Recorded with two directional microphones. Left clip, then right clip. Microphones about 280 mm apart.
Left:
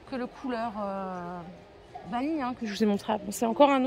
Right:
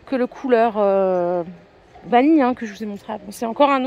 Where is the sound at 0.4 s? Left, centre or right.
Right.